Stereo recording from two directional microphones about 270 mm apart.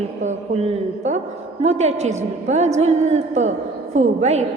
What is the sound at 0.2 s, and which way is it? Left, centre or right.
A woman's voice, right.